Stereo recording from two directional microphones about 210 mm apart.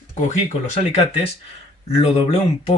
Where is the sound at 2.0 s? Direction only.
30° left (ahead or behind).